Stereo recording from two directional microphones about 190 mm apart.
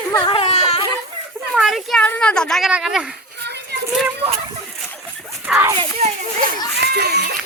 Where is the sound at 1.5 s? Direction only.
Centre (ahead or behind).